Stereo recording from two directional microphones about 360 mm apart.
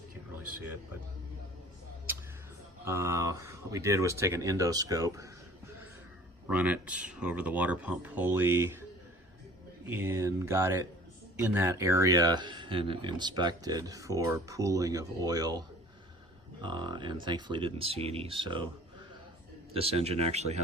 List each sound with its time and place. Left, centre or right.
2.8 s speech: centre
6.5 s speech: centre
9.8 s speech: centre
16.6 s speech: centre
19.7 s speech: centre